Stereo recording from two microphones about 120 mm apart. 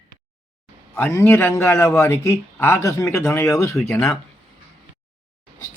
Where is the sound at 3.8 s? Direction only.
10° left (ahead or behind).